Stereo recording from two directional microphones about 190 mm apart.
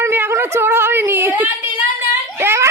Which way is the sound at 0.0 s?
10° right (ahead or behind).